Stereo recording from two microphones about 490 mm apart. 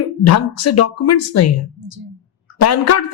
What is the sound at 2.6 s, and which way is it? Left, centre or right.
Speech, left.